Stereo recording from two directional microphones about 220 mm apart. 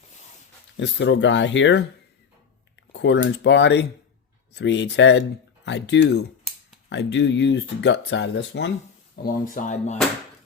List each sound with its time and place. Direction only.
0.8 s speech: 55° left (ahead or behind)
2.9 s speech: 55° left (ahead or behind)
9.2 s speech: 40° left (ahead or behind)